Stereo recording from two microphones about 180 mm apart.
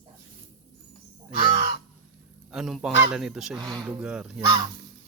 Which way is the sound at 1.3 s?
55° left (ahead or behind).